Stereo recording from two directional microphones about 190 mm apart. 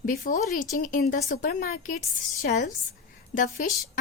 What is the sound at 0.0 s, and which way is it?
Speech, 45° left (ahead or behind).